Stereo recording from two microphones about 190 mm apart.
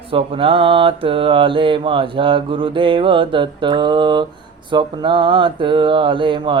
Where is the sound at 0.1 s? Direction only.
30° right (ahead or behind).